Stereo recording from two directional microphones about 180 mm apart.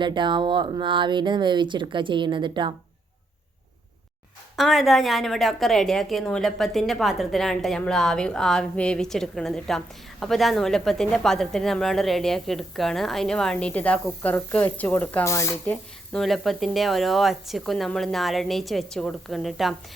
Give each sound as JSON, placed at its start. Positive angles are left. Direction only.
{"t": 0.0, "sound": "speech", "side_deg": -25}
{"t": 4.5, "sound": "a woman's voice", "side_deg": 0}